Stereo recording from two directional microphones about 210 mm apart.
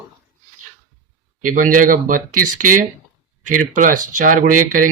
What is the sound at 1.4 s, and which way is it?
Speech, 40° right (ahead or behind).